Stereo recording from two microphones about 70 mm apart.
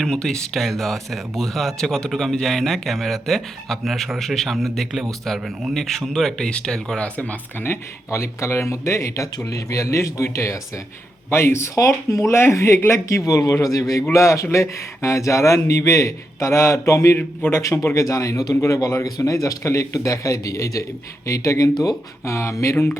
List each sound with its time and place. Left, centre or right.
0.0 s speech: centre
7.6 s speech: left
11.7 s speech: left
13.1 s speech: left
14.1 s speech: left
17.2 s speech: left
17.6 s speech: left
19.0 s speech: left